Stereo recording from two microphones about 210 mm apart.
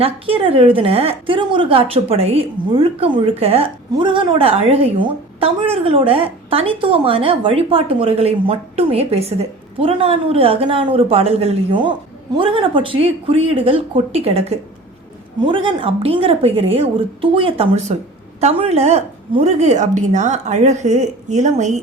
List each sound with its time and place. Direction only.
0.0 s a woman's voice: 25° right (ahead or behind)